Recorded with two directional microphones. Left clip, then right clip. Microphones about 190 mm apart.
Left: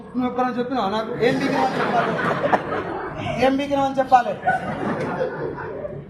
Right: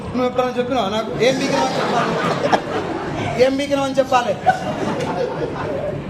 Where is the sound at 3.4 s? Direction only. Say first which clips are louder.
Right 2 dB; 20° right (ahead or behind).